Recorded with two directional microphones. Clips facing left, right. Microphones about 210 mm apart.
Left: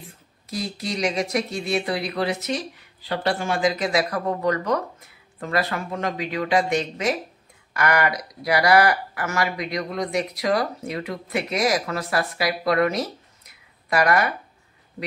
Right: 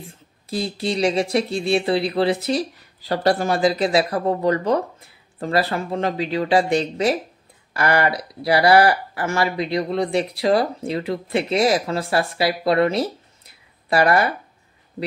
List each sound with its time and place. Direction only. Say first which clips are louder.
0.5 s speech: right 5 dB; 30° right (ahead or behind)